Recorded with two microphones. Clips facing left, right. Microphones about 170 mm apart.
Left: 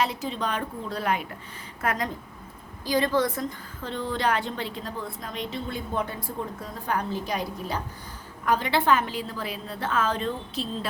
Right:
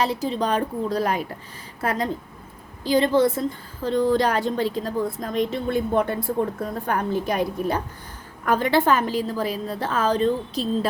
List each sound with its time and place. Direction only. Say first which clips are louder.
0.0 s a woman's voice: right 5 dB; 35° right (ahead or behind)
3.8 s a woman's voice: right 7 dB; 40° right (ahead or behind)